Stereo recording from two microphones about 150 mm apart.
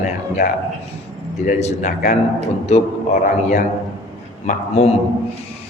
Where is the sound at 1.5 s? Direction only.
50° left (ahead or behind).